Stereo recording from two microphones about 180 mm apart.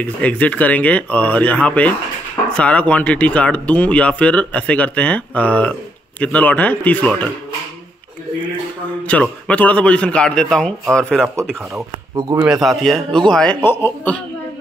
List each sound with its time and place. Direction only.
0.0 s speech: 10° left (ahead or behind)
9.0 s a man's voice: 5° left (ahead or behind)
11.7 s speech: 15° right (ahead or behind)
12.6 s a man's voice: centre (ahead or behind)